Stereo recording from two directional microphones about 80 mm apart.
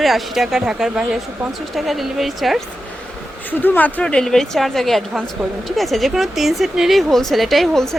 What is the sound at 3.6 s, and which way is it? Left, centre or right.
Speech, left.